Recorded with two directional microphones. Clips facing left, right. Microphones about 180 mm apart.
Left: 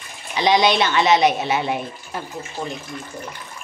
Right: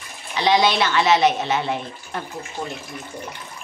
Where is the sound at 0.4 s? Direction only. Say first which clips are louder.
Left 1 dB; 15° left (ahead or behind).